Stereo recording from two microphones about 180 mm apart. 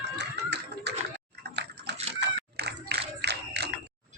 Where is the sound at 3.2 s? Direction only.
65° right (ahead or behind).